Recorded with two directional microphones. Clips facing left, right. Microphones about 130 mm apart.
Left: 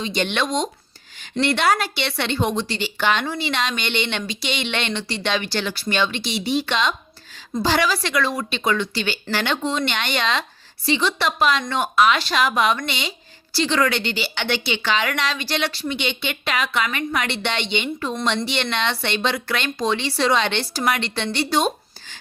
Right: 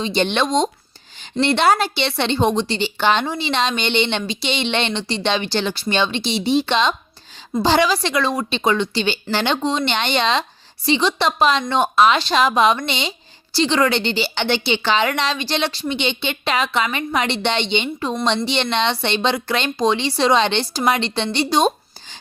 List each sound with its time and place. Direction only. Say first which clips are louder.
0.0 s speech: right 4 dB; 30° right (ahead or behind)